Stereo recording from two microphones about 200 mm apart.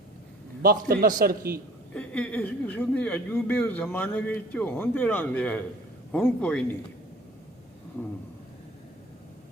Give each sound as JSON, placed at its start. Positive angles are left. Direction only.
{"t": 0.6, "sound": "a man's voice", "side_deg": -45}
{"t": 1.9, "sound": "a man's voice", "side_deg": 5}